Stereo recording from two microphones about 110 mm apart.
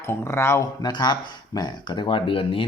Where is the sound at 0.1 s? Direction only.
25° left (ahead or behind).